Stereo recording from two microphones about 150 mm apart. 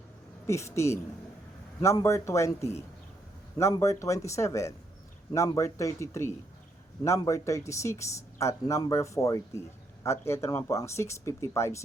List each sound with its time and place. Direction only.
0.4 s speech: 20° left (ahead or behind)